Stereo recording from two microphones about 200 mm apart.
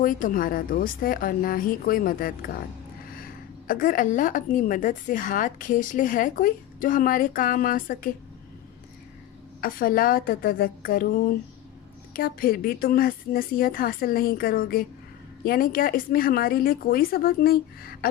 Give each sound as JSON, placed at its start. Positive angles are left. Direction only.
{"t": 0.0, "sound": "a woman's voice", "side_deg": 40}
{"t": 9.6, "sound": "a woman's voice", "side_deg": 45}